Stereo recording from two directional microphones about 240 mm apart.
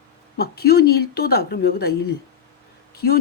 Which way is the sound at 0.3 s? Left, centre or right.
Left.